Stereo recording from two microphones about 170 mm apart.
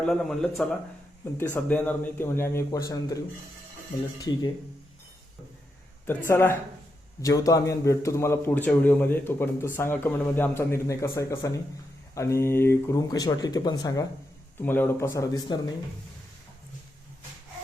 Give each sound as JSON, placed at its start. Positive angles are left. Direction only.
{"t": 0.0, "sound": "a man's voice", "side_deg": 0}
{"t": 6.1, "sound": "a man's voice", "side_deg": 15}
{"t": 14.6, "sound": "a man's voice", "side_deg": 10}